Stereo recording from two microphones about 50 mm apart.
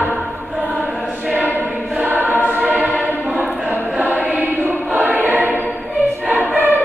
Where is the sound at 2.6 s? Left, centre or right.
Right.